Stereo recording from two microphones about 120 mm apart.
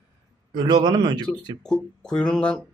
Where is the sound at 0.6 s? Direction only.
40° right (ahead or behind).